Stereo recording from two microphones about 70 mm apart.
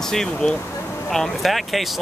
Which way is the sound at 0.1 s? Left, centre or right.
Centre.